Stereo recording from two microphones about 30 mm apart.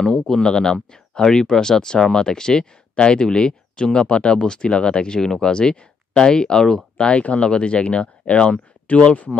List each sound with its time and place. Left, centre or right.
0.3 s speech: left
7.0 s speech: left
8.9 s speech: left